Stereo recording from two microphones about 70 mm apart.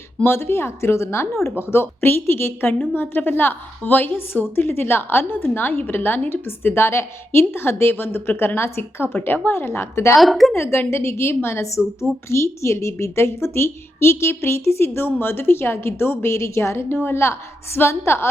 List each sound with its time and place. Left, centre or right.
0.2 s a woman's voice: left
10.2 s speech: centre
10.5 s a woman's voice: left